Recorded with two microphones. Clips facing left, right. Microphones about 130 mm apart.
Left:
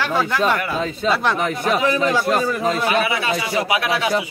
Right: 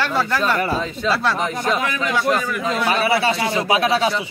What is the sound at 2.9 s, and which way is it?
A man's voice, 35° right (ahead or behind).